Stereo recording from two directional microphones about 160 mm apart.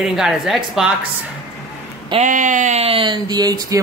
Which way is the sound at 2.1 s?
50° right (ahead or behind).